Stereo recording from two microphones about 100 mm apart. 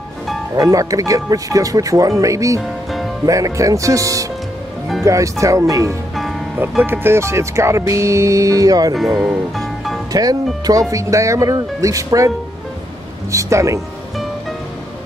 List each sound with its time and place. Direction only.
0.6 s speech: 35° right (ahead or behind)
2.6 s music: centre (ahead or behind)
3.3 s speech: 35° right (ahead or behind)
8.9 s speech: 5° right (ahead or behind)
10.1 s speech: 40° right (ahead or behind)
13.3 s speech: 30° right (ahead or behind)